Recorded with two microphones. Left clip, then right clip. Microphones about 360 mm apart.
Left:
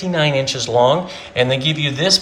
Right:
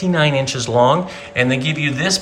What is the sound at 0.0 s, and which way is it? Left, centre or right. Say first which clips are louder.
Speech: even; centre.